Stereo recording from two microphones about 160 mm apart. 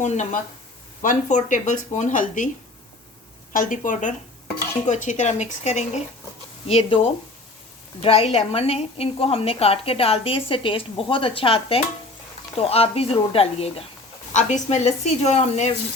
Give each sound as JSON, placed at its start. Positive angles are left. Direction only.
{"t": 0.0, "sound": "speech", "side_deg": 50}
{"t": 3.5, "sound": "a woman's voice", "side_deg": 55}